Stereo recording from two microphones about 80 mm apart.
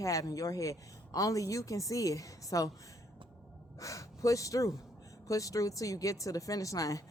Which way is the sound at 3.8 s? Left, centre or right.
Left.